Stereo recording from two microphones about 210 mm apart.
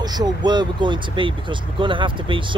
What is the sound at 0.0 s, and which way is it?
Speech, 20° right (ahead or behind).